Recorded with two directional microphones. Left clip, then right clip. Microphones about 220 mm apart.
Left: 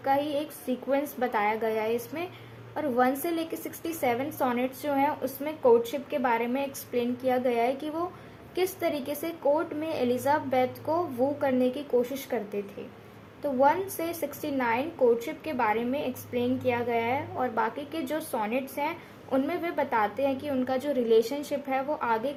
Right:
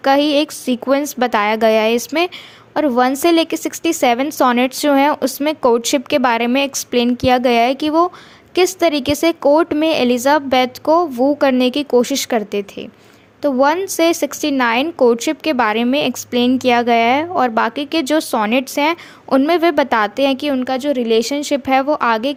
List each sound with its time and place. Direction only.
0.0 s a woman's voice: 40° right (ahead or behind)